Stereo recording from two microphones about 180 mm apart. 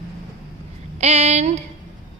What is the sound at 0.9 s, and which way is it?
Speech, 35° right (ahead or behind).